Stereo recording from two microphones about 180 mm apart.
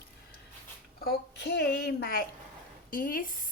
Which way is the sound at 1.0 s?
65° left (ahead or behind).